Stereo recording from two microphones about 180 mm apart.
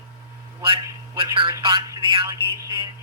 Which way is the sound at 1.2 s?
30° right (ahead or behind).